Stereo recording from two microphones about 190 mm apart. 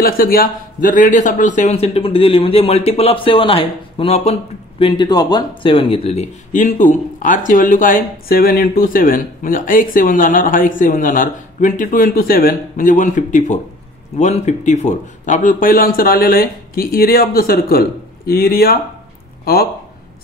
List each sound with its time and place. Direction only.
0.0 s speech: 50° left (ahead or behind)